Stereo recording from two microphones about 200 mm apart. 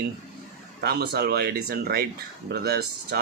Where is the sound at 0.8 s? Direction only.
55° right (ahead or behind).